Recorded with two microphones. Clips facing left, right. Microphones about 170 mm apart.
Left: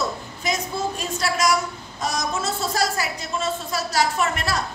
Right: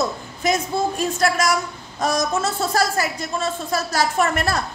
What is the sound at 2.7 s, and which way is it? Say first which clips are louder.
A woman's voice: right 4 dB; 50° right (ahead or behind).